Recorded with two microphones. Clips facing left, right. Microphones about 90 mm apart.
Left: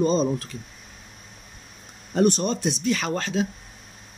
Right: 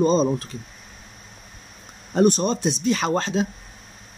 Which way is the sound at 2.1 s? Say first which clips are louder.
Right 2 dB; 20° right (ahead or behind).